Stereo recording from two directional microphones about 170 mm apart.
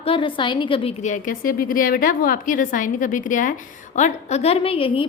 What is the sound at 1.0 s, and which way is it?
A woman's voice, 55° left (ahead or behind).